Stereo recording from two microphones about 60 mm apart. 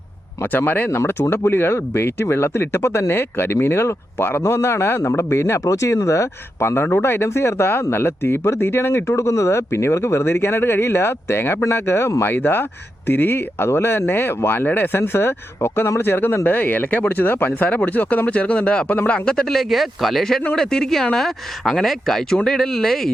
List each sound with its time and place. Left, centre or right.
0.4 s speech: left; by 23.1 s centre